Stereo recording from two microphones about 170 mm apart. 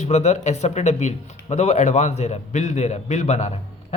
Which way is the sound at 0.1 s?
40° left (ahead or behind).